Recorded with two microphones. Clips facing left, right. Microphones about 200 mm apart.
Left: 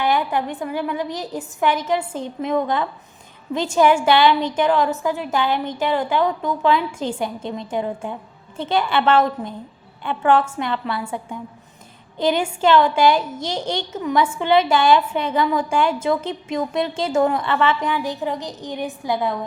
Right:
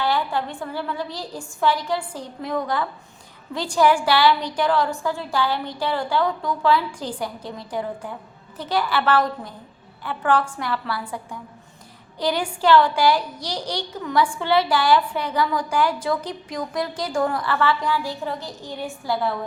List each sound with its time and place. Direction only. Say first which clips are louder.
0.0 s a woman's voice: left 3 dB; 20° left (ahead or behind)
12.1 s a woman's voice: left 4 dB; 25° left (ahead or behind)